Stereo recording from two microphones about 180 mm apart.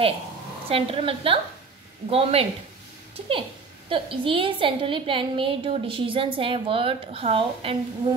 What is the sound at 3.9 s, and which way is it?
A woman's voice, 30° right (ahead or behind).